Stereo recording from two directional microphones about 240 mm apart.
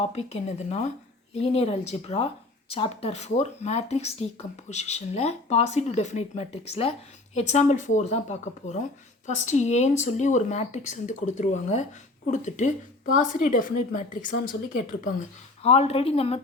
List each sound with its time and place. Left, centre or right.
0.0 s a woman's voice: left